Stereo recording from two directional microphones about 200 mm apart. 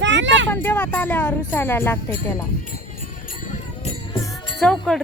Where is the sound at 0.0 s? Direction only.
65° right (ahead or behind).